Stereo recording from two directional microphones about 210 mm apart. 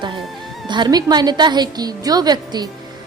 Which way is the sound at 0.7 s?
20° right (ahead or behind).